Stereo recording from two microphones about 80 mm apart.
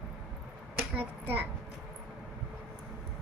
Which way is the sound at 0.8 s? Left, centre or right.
Right.